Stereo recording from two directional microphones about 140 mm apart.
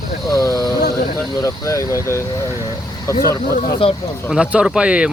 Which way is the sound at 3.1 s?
25° left (ahead or behind).